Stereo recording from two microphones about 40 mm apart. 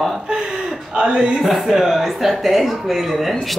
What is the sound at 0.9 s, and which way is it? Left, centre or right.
Speech, right.